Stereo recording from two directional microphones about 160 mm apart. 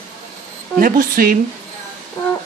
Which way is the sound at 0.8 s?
60° right (ahead or behind).